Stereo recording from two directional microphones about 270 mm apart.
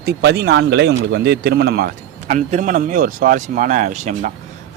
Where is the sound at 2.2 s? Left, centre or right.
Right.